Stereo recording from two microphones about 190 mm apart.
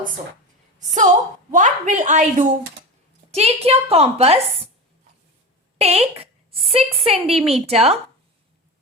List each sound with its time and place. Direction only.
0.8 s a woman's voice: 40° right (ahead or behind)
5.7 s a sound: 35° right (ahead or behind)
6.7 s a woman's voice: 30° right (ahead or behind)